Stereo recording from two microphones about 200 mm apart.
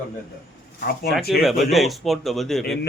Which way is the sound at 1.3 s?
Centre (ahead or behind).